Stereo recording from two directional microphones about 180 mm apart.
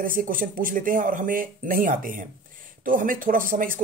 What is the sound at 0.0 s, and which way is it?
Speech, 50° right (ahead or behind).